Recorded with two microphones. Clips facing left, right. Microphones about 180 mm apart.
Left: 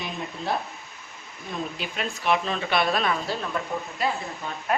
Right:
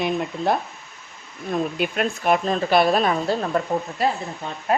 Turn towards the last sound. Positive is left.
turn(degrees=-30)  # may be behind; listen again after turning